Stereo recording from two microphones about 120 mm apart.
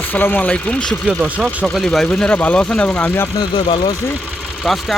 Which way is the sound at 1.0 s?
Centre (ahead or behind).